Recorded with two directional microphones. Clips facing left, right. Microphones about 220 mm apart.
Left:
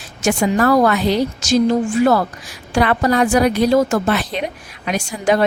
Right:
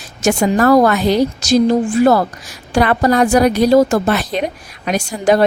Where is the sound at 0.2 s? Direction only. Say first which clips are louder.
Right 2 dB; 40° right (ahead or behind).